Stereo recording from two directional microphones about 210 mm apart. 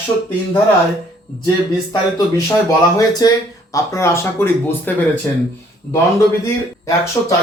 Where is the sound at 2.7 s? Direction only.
20° left (ahead or behind).